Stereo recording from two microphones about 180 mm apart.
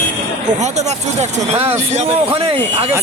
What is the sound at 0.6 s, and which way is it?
Speech, 40° right (ahead or behind).